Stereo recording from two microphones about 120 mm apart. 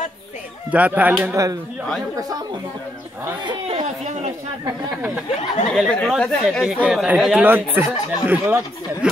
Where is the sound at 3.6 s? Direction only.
55° right (ahead or behind).